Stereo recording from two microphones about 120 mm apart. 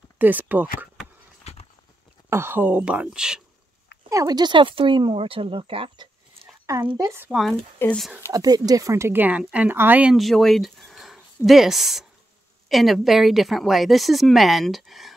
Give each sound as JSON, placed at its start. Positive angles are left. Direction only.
{"t": 0.2, "sound": "speech", "side_deg": -15}
{"t": 1.4, "sound": "a sound", "side_deg": 60}
{"t": 2.2, "sound": "speech", "side_deg": -20}
{"t": 4.1, "sound": "speech", "side_deg": -30}
{"t": 6.4, "sound": "a sound", "side_deg": -25}
{"t": 7.2, "sound": "speech", "side_deg": 0}
{"t": 7.8, "sound": "speech", "side_deg": 15}
{"t": 8.3, "sound": "speech", "side_deg": -30}
{"t": 10.1, "sound": "speech", "side_deg": 0}